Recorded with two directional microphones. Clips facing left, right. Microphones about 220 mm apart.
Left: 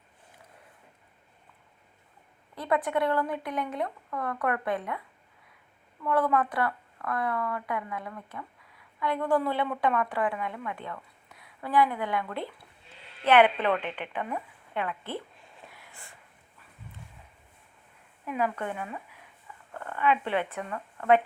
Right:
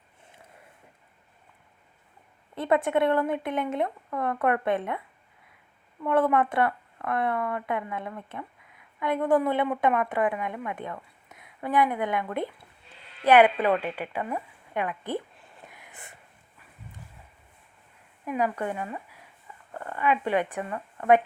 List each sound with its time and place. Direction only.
2.6 s a woman's voice: 25° right (ahead or behind)
15.7 s a sound: 20° right (ahead or behind)
18.3 s a woman's voice: 10° right (ahead or behind)